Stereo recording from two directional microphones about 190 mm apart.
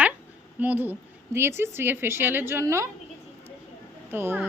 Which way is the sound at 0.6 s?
10° right (ahead or behind).